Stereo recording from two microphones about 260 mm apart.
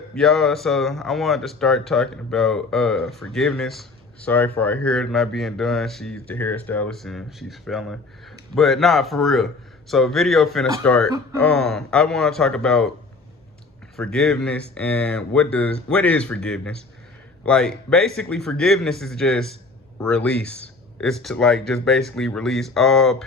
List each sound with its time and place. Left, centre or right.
0.1 s speech: centre
13.9 s speech: centre